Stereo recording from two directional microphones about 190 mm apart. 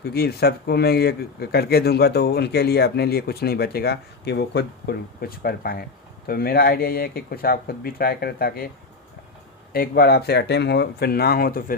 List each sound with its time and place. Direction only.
0.0 s speech: 55° left (ahead or behind)
9.7 s speech: 50° left (ahead or behind)